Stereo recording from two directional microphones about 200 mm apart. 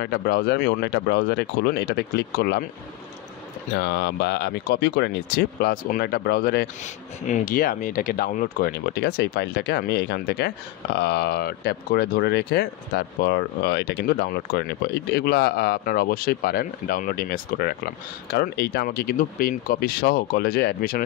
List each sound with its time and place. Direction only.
0.0 s speech: 55° left (ahead or behind)
3.7 s speech: 55° left (ahead or behind)